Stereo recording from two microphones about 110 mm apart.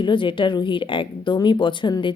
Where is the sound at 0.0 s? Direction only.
50° left (ahead or behind).